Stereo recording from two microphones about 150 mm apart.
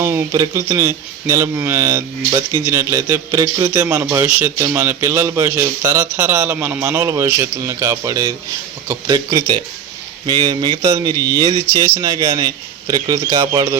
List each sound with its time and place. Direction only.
0.0 s speech: 20° right (ahead or behind)